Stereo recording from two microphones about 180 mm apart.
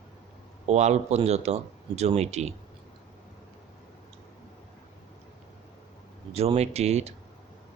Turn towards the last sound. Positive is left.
turn(degrees=-35)  # may be behind; listen again after turning